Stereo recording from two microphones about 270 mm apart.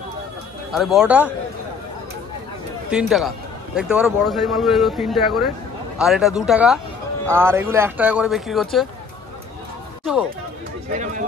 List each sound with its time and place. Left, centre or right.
0.7 s speech: centre
2.9 s speech: centre
10.9 s speech: right